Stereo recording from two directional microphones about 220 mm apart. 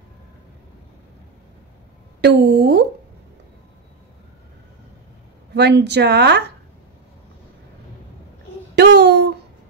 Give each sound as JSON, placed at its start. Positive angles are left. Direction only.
{"t": 2.2, "sound": "speech", "side_deg": -50}
{"t": 5.5, "sound": "speech", "side_deg": -50}
{"t": 8.7, "sound": "a sound", "side_deg": -50}